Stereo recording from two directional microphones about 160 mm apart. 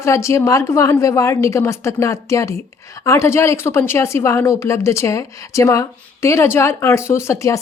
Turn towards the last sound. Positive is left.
turn(degrees=20)  # may be behind; listen again after turning